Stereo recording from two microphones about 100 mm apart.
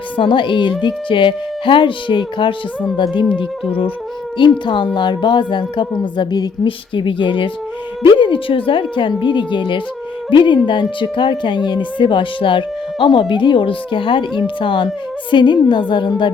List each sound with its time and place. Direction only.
0.2 s speech: 55° left (ahead or behind)
4.4 s speech: 50° left (ahead or behind)